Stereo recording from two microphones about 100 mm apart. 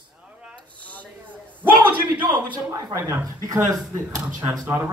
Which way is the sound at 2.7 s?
35° right (ahead or behind).